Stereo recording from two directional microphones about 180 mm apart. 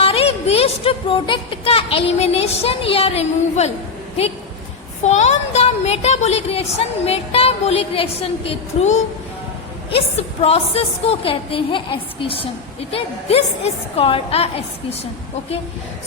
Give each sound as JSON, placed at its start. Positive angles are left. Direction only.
{"t": 0.0, "sound": "music", "side_deg": 35}
{"t": 4.2, "sound": "speech", "side_deg": 35}